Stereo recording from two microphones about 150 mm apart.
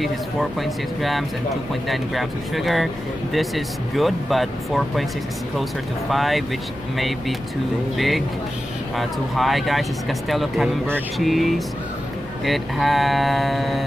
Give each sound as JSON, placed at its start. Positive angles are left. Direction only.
{"t": 0.0, "sound": "speech", "side_deg": 0}
{"t": 8.9, "sound": "speech", "side_deg": 0}